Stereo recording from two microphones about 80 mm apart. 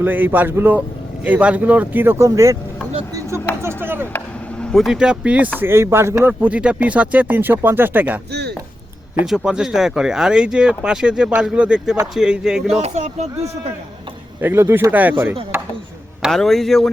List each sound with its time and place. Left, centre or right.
0.0 s speech: right
3.2 s a sound: right
3.6 s chop: right
4.7 s speech: centre
4.9 s speech: centre
5.5 s speech: right
6.4 s speech: centre
9.2 s speech: centre
14.4 s speech: right
16.3 s speech: centre